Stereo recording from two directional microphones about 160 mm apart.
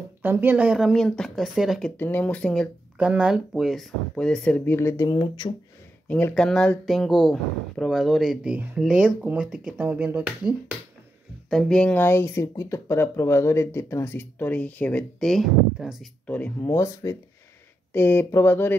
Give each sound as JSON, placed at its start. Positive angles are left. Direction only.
{"t": 0.2, "sound": "speech", "side_deg": -15}
{"t": 2.0, "sound": "speech", "side_deg": 10}
{"t": 3.0, "sound": "speech", "side_deg": -5}
{"t": 6.0, "sound": "speech", "side_deg": 10}
{"t": 11.5, "sound": "speech", "side_deg": 5}